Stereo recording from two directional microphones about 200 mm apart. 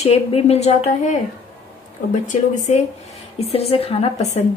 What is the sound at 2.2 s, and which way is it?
A woman's voice, 40° left (ahead or behind).